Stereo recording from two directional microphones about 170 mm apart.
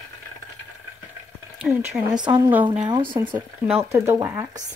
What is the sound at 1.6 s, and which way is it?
Speech, 5° right (ahead or behind).